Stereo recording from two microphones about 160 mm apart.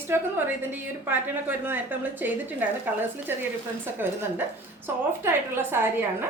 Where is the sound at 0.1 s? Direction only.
15° right (ahead or behind).